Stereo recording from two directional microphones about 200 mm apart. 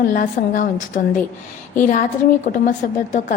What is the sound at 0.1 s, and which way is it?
A woman's voice, 40° left (ahead or behind).